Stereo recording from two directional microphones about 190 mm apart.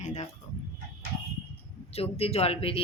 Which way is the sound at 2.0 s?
30° left (ahead or behind).